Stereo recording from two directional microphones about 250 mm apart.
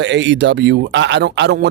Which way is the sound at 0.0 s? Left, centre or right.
Right.